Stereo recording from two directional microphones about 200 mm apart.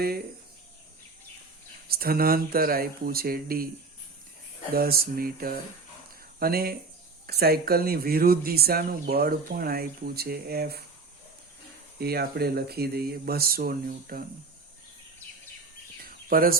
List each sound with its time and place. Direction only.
1.9 s speech: 50° right (ahead or behind)
4.7 s speech: 50° right (ahead or behind)
11.9 s speech: 50° right (ahead or behind)
16.0 s a sound: 45° right (ahead or behind)